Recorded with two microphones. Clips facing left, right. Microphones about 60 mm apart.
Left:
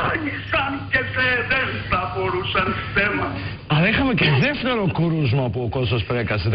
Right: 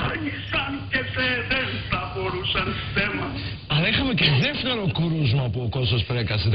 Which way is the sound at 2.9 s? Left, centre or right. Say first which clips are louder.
Left 5 dB; left.